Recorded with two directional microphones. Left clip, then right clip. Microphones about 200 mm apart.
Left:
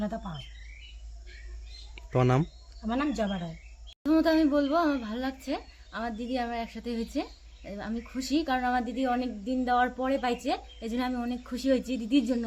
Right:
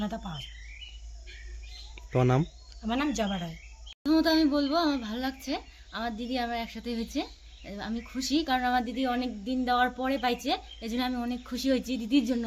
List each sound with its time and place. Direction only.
0.2 s speech: centre (ahead or behind)
2.0 s speech: centre (ahead or behind)
4.0 s speech: 10° left (ahead or behind)